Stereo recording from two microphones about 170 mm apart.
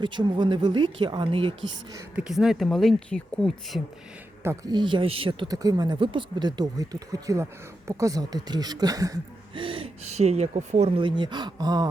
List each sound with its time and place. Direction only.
0.0 s speech: 25° right (ahead or behind)
2.1 s speech: 5° right (ahead or behind)
4.4 s speech: 25° right (ahead or behind)